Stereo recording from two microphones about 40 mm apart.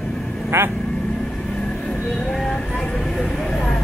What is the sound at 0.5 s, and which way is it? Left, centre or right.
Speech, right.